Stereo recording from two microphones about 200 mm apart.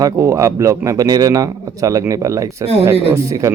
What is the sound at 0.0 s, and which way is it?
A man's voice, 15° right (ahead or behind).